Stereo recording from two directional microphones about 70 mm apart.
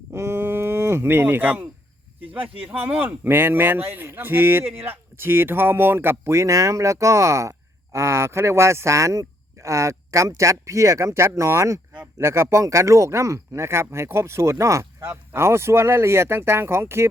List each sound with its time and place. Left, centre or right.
0.1 s a sound: right
2.2 s speech: right
2.6 s speech: right